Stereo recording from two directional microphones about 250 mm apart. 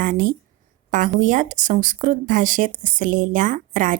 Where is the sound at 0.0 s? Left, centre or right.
Right.